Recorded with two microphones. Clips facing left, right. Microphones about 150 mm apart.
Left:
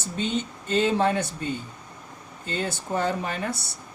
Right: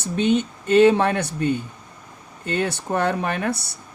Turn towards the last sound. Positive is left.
turn(degrees=-65)  # may be behind; listen again after turning